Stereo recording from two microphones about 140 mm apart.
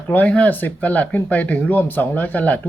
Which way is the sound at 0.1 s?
10° left (ahead or behind).